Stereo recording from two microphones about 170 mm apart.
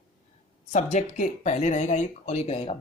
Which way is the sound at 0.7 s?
40° left (ahead or behind).